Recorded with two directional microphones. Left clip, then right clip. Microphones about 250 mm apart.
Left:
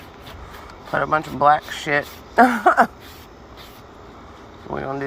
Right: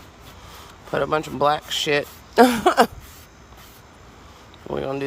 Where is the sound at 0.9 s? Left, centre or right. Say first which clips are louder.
Left 2 dB; right.